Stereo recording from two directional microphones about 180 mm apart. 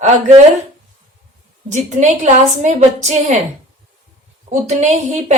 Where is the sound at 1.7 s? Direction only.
40° right (ahead or behind).